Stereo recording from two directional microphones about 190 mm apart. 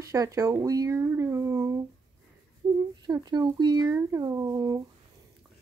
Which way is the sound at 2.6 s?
20° right (ahead or behind).